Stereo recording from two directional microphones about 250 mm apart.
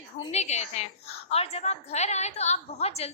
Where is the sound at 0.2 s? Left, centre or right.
Left.